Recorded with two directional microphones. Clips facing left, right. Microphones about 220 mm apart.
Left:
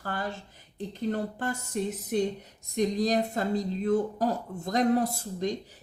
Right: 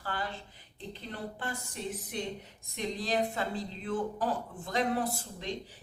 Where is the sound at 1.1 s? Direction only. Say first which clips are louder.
Left 7 dB; 45° left (ahead or behind).